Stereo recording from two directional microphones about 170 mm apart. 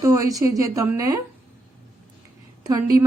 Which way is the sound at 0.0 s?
20° right (ahead or behind).